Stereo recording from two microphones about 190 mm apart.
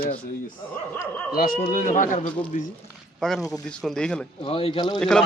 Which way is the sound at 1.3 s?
45° left (ahead or behind).